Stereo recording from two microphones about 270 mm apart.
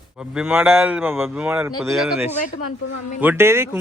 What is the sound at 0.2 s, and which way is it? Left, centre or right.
A man's voice, centre.